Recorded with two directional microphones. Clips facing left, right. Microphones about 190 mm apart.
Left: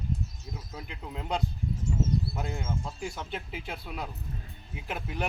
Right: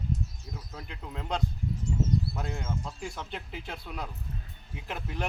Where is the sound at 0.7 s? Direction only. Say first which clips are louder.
Left 1 dB; 10° left (ahead or behind).